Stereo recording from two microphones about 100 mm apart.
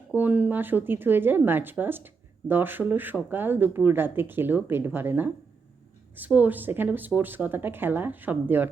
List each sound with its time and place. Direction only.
0.1 s speech: 15° right (ahead or behind)